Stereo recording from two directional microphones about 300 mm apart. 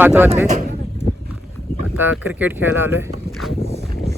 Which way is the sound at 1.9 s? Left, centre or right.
Centre.